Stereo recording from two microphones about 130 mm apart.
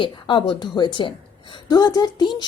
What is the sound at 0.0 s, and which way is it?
Speech, 40° left (ahead or behind).